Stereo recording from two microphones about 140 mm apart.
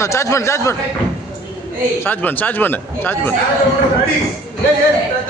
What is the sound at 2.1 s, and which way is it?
Speech, 15° left (ahead or behind).